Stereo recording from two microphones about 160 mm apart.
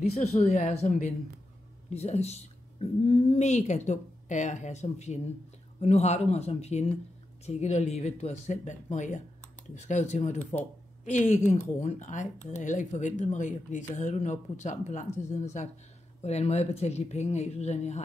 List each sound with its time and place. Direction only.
0.1 s speech: 40° left (ahead or behind)